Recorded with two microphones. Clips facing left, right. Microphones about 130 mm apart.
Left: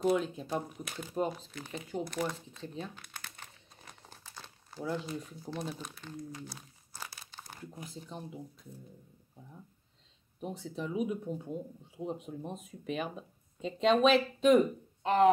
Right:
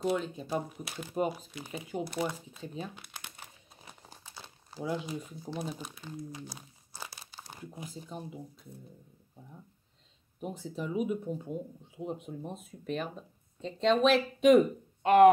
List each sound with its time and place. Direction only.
0.0 s speech: centre (ahead or behind)
3.2 s crumpling: 15° right (ahead or behind)
8.1 s speech: 5° right (ahead or behind)
10.4 s speech: 5° right (ahead or behind)
15.0 s speech: 65° right (ahead or behind)